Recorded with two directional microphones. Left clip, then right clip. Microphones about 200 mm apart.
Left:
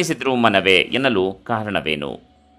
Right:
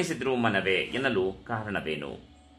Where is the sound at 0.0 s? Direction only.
40° left (ahead or behind).